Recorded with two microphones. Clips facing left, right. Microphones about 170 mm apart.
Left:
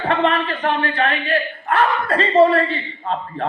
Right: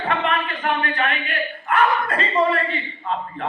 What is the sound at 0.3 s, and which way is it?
A man's voice, 35° left (ahead or behind).